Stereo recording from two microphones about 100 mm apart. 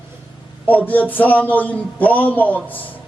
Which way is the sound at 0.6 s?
15° left (ahead or behind).